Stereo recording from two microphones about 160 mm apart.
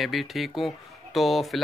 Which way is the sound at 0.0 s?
Centre (ahead or behind).